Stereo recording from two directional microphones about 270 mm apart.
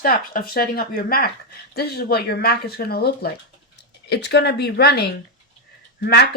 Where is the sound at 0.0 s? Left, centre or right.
Left.